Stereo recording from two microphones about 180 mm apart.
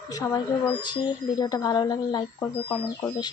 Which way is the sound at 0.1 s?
20° left (ahead or behind).